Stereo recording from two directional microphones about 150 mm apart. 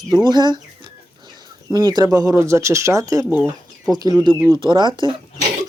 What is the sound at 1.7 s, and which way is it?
Speech, 25° right (ahead or behind).